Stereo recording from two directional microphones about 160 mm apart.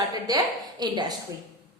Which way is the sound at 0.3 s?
25° right (ahead or behind).